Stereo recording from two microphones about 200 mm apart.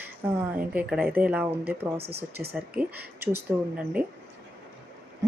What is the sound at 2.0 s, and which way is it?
Speech, 55° right (ahead or behind).